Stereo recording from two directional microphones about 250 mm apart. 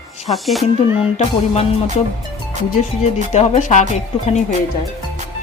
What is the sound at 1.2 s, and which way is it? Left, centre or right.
Music, left.